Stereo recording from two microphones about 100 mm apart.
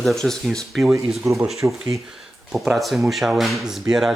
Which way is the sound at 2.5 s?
Centre (ahead or behind).